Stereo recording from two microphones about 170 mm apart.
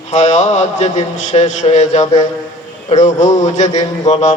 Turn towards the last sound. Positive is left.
turn(degrees=45)  # may be behind; listen again after turning